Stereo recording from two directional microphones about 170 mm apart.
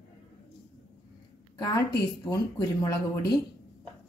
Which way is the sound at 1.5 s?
25° left (ahead or behind).